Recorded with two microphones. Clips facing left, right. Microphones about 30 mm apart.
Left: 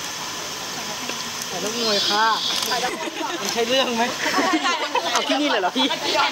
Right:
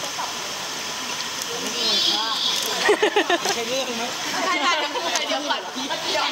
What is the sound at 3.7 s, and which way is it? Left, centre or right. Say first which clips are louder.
Speech: left 6 dB; left.